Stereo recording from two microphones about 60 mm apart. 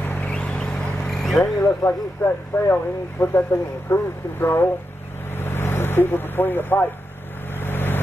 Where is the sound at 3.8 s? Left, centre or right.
Left.